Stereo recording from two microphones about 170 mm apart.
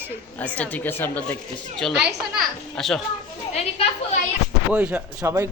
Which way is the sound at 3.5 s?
40° left (ahead or behind).